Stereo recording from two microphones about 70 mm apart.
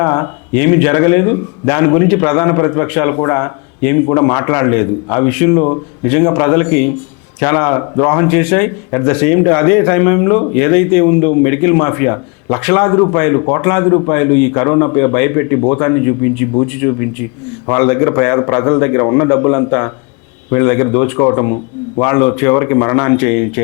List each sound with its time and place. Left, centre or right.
0.0 s a man's voice: left